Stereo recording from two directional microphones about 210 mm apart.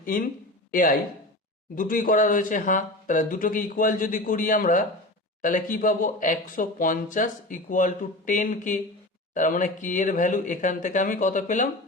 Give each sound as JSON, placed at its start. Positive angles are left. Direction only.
{"t": 0.0, "sound": "speech", "side_deg": 40}